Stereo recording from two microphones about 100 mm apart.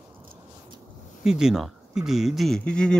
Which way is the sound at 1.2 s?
5° right (ahead or behind).